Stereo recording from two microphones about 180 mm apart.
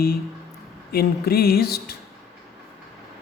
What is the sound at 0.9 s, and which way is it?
Speech, 60° left (ahead or behind).